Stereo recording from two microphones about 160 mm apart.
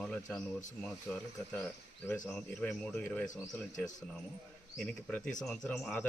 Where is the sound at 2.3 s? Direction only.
5° left (ahead or behind).